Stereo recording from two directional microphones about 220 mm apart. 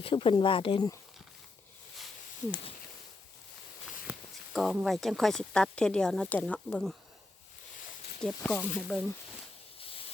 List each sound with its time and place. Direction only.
0.0 s speech: 25° left (ahead or behind)
4.1 s a sound: 10° right (ahead or behind)
4.5 s speech: centre (ahead or behind)
8.2 s speech: 5° left (ahead or behind)